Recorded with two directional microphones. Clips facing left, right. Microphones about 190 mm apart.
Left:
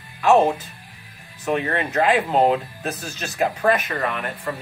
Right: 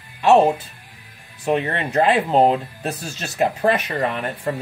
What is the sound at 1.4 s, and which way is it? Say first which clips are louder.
Speech: right 2 dB; 30° right (ahead or behind).